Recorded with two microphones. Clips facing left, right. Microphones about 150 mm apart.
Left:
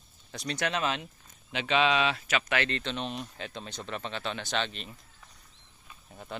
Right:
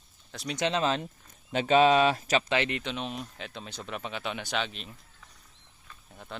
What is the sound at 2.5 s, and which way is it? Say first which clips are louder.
Speech: right 2 dB; 15° right (ahead or behind).